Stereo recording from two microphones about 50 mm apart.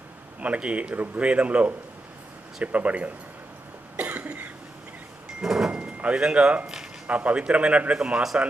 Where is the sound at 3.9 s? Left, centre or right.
Right.